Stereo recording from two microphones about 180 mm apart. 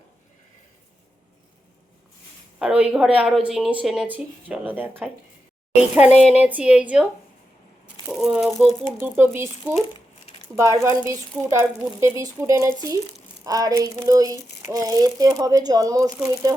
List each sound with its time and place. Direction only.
2.6 s a woman's voice: 5° right (ahead or behind)
9.0 s speech: 10° right (ahead or behind)